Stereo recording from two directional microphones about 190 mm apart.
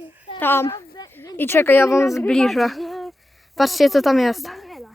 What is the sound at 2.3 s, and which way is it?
A woman's voice, centre (ahead or behind).